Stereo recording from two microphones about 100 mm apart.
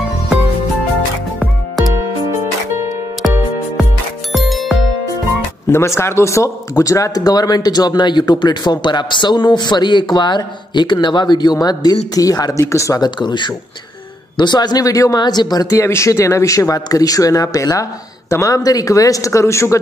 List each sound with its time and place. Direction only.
4.3 s music: centre (ahead or behind)
5.7 s speech: 25° left (ahead or behind)
13.0 s speech: 50° left (ahead or behind); by 19.8 s 30° left (ahead or behind)